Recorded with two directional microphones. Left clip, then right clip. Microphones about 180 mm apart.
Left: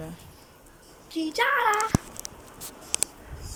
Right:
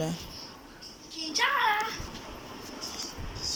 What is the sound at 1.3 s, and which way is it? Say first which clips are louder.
Speech: left 2 dB; 65° left (ahead or behind).